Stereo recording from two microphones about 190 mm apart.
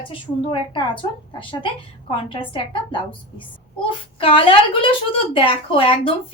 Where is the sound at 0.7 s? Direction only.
25° left (ahead or behind).